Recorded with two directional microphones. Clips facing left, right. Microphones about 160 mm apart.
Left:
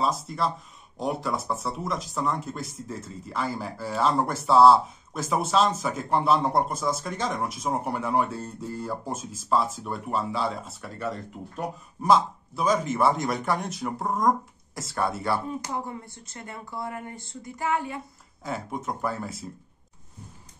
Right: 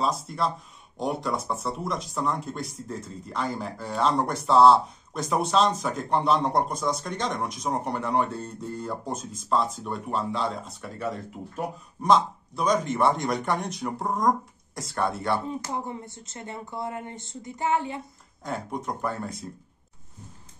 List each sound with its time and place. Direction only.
0.0 s speech: centre (ahead or behind)
15.4 s speech: 25° right (ahead or behind)
18.4 s speech: centre (ahead or behind)